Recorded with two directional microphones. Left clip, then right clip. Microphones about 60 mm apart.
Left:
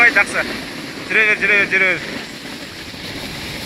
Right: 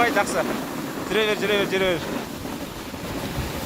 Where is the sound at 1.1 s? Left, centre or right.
Right.